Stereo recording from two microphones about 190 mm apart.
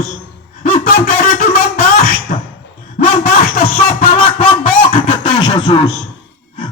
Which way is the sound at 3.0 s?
40° left (ahead or behind).